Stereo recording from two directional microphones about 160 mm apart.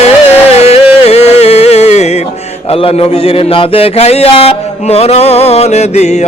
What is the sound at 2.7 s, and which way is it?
A man's voice, 35° left (ahead or behind).